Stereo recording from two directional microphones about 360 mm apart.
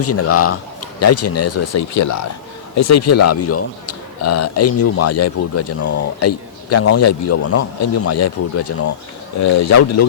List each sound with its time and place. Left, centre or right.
0.0 s a man's voice: left